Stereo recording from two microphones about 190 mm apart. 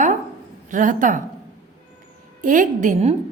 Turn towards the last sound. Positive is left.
turn(degrees=-40)  # may be behind; listen again after turning